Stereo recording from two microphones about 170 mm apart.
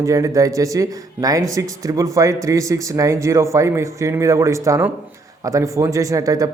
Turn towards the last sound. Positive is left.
turn(degrees=-20)  # may be behind; listen again after turning